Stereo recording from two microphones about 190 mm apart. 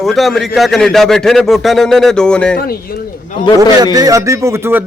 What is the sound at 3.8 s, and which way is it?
Music, 20° right (ahead or behind).